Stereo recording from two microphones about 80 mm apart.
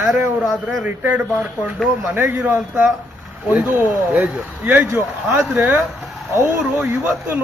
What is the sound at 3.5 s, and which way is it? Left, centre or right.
Speech, right.